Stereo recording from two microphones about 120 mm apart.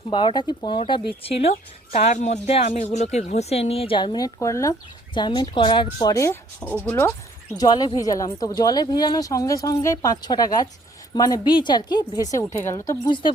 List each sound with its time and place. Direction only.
0.1 s speech: 40° left (ahead or behind)
1.9 s speech: 75° left (ahead or behind); by 4.3 s 40° left (ahead or behind)
4.4 s speech: 25° left (ahead or behind)
5.1 s speech: 40° left (ahead or behind); by 7.1 s 20° left (ahead or behind)
7.6 s speech: 35° left (ahead or behind)
13.1 s speech: 40° left (ahead or behind)